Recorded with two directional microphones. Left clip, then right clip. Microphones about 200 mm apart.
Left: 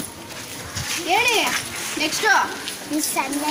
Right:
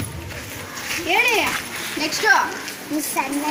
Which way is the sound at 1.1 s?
25° right (ahead or behind).